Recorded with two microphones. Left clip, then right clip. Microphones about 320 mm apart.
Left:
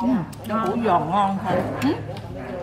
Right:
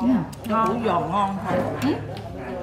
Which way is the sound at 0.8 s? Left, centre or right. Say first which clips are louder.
Left 3 dB; left.